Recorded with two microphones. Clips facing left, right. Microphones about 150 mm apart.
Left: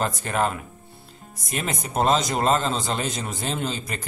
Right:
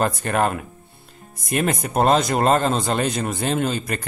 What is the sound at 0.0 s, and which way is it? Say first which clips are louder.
Speech: right 4 dB; 55° right (ahead or behind).